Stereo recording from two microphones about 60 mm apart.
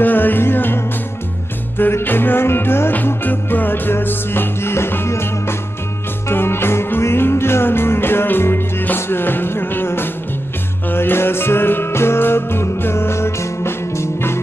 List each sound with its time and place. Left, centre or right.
0.0 s music: left
1.8 s music: left